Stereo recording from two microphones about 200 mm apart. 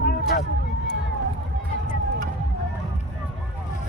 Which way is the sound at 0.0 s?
50° left (ahead or behind).